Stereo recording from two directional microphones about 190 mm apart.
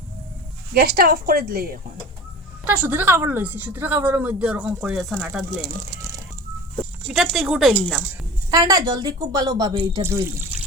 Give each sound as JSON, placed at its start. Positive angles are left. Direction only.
{"t": 0.7, "sound": "a woman's voice", "side_deg": -50}
{"t": 2.6, "sound": "a woman's voice", "side_deg": -10}
{"t": 5.6, "sound": "speech", "side_deg": -20}
{"t": 7.1, "sound": "speech", "side_deg": 0}
{"t": 8.4, "sound": "speech", "side_deg": -20}
{"t": 10.0, "sound": "a woman's voice", "side_deg": -10}